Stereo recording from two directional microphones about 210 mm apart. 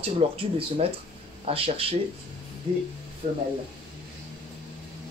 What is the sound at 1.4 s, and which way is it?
Speech, 25° right (ahead or behind).